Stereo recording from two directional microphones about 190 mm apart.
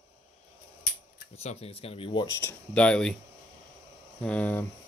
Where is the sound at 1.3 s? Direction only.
35° left (ahead or behind).